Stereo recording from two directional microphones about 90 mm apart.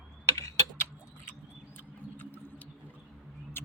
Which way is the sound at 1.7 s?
20° left (ahead or behind).